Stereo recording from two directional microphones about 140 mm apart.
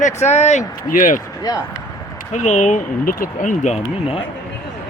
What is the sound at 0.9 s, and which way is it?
Speech, 75° left (ahead or behind).